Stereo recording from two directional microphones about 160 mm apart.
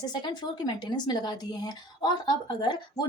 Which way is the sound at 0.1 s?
25° left (ahead or behind).